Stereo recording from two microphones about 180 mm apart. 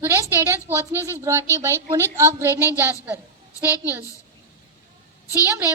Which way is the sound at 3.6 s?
10° right (ahead or behind).